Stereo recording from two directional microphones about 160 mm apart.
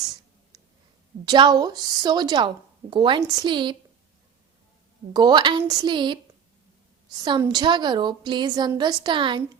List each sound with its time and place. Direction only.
1.2 s a woman's voice: 25° right (ahead or behind)
5.1 s a woman's voice: 25° right (ahead or behind)